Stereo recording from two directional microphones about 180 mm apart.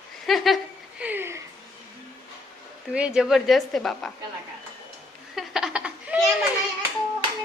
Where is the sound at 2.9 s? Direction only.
5° right (ahead or behind).